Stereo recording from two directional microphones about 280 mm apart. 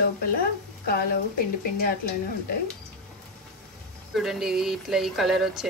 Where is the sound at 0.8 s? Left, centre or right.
Left.